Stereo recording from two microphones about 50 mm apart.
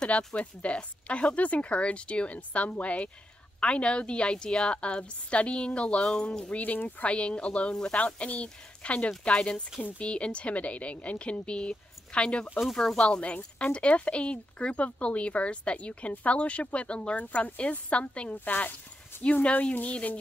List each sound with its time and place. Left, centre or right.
0.3 s speech: left
6.5 s speech: left
9.8 s speech: left
10.0 s speech: left